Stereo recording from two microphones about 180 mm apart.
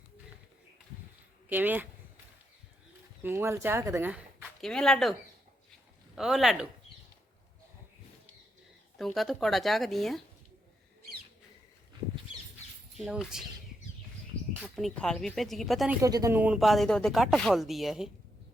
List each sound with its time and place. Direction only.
1.5 s speech: 10° right (ahead or behind)
3.2 s speech: 15° right (ahead or behind); by 5.1 s centre (ahead or behind)
6.1 s speech: centre (ahead or behind)
9.0 s speech: centre (ahead or behind)
13.0 s speech: centre (ahead or behind)
14.6 s speech: 5° left (ahead or behind)
16.0 s speech: 20° right (ahead or behind); by 18.1 s centre (ahead or behind)